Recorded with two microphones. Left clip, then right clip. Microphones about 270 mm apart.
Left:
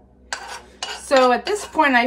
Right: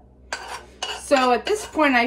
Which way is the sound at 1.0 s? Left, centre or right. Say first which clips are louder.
Left 3 dB; left.